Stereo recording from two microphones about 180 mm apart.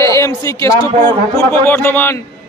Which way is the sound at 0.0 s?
15° left (ahead or behind).